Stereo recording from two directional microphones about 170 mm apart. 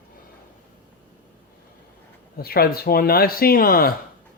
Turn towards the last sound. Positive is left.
turn(degrees=60)  # may be behind; listen again after turning